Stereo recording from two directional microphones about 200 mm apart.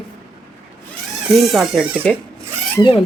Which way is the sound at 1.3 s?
Centre (ahead or behind).